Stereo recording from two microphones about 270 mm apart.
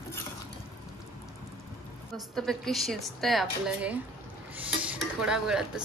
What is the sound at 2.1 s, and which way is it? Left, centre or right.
Speech, centre.